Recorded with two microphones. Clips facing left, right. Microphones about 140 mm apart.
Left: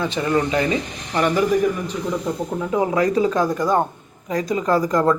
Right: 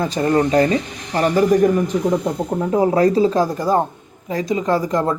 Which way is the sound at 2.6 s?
35° right (ahead or behind).